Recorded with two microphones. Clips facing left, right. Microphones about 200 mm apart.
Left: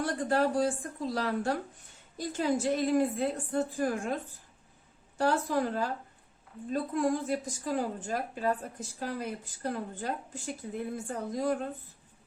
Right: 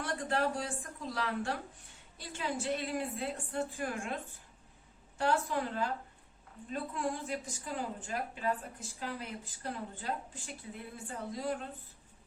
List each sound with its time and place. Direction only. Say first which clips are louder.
0.0 s a woman's voice: left 5 dB; 40° left (ahead or behind)